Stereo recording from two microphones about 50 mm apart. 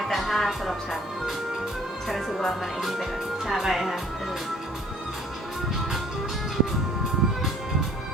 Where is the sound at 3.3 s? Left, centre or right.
Centre.